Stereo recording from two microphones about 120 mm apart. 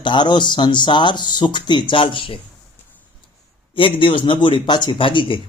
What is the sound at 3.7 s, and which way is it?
Speech, 45° left (ahead or behind).